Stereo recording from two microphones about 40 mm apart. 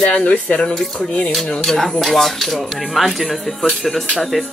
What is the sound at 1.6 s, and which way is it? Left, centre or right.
Speech, centre.